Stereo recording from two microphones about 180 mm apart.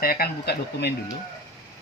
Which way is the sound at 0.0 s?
55° left (ahead or behind).